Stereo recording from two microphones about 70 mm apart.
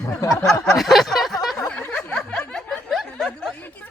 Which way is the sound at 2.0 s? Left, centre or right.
Centre.